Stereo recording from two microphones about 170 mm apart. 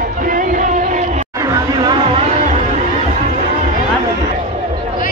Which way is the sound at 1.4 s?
25° right (ahead or behind).